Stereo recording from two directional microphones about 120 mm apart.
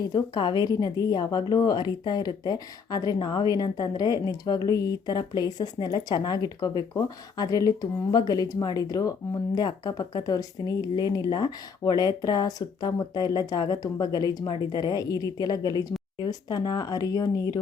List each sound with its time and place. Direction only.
0.1 s a woman's voice: 35° left (ahead or behind)